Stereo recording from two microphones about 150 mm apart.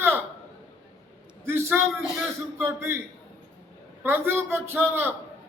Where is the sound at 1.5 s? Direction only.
15° right (ahead or behind).